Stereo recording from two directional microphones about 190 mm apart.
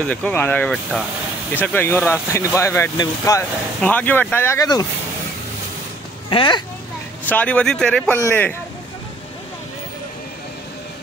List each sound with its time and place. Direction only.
0.0 s speech: 5° left (ahead or behind)
6.3 s speech: 25° left (ahead or behind)
7.2 s speech: 5° left (ahead or behind)